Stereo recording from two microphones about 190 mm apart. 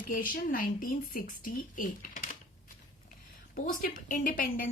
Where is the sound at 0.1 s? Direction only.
45° left (ahead or behind).